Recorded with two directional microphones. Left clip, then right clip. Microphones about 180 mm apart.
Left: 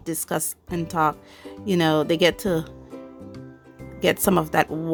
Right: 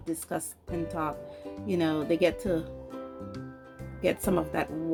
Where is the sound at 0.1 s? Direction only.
60° left (ahead or behind).